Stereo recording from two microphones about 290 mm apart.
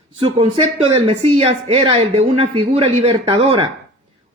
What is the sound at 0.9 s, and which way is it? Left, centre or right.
A man's voice, centre.